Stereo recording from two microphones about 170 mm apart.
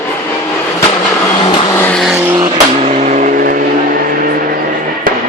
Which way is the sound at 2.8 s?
45° right (ahead or behind).